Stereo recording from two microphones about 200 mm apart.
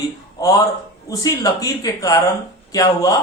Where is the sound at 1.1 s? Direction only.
15° left (ahead or behind).